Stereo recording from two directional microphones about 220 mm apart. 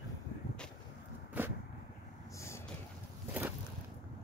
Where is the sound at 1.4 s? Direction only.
5° right (ahead or behind).